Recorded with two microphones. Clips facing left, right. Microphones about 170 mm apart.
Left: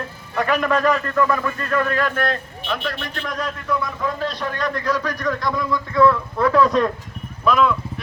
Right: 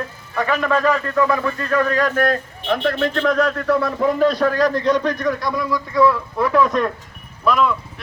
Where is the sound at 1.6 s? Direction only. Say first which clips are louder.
Right 3 dB; 35° right (ahead or behind).